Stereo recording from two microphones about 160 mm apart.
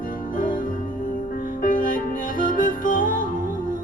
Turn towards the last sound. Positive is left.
turn(degrees=60)  # may be behind; listen again after turning